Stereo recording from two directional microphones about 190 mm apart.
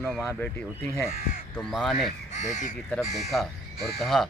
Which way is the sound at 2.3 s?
40° left (ahead or behind).